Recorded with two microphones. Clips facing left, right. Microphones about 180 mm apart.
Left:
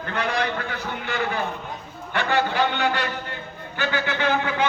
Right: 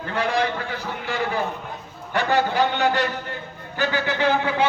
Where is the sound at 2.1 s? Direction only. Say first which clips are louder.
Right 2 dB; 40° right (ahead or behind).